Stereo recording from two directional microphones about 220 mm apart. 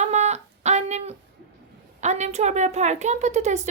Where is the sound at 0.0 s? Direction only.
30° right (ahead or behind).